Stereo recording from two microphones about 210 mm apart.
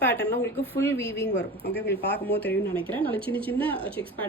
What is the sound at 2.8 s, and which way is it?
A woman's voice, 10° left (ahead or behind).